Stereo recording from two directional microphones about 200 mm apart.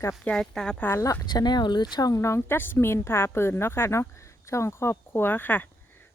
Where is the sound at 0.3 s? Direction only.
5° left (ahead or behind).